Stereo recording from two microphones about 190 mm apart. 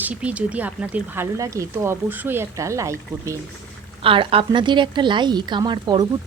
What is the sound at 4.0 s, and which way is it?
A woman's voice, 30° right (ahead or behind).